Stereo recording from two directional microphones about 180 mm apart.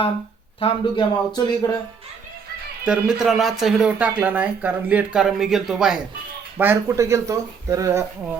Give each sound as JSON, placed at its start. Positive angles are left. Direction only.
{"t": 0.6, "sound": "speech", "side_deg": 30}
{"t": 2.8, "sound": "speech", "side_deg": -5}
{"t": 6.6, "sound": "speech", "side_deg": -15}